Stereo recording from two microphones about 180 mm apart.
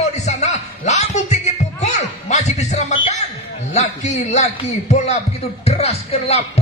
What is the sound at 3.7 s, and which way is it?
A man's voice, 40° left (ahead or behind).